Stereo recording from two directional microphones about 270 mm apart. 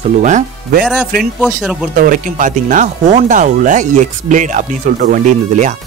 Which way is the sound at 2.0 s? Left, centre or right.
Right.